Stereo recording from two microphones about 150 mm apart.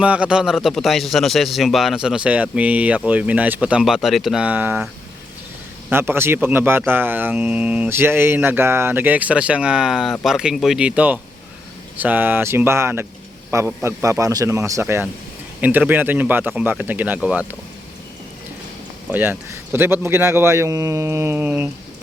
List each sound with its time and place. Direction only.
0.0 s a man's voice: 5° right (ahead or behind)
5.9 s a man's voice: 15° right (ahead or behind)
19.1 s speech: 10° right (ahead or behind)